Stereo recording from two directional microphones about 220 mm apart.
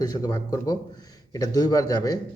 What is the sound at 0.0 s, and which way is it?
A man's voice, 15° left (ahead or behind).